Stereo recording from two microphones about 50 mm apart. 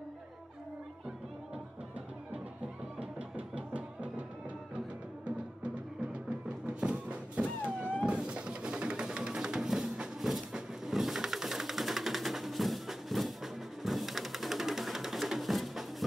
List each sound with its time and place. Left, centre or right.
3.0 s music: right; by 15.8 s centre